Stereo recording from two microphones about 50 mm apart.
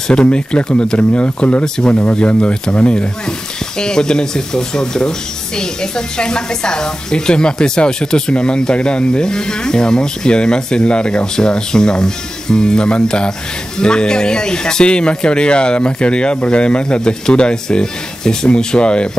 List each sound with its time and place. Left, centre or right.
0.1 s a woman's voice: centre